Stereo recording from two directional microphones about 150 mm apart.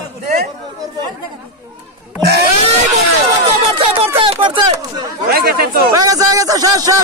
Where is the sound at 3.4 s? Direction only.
40° right (ahead or behind).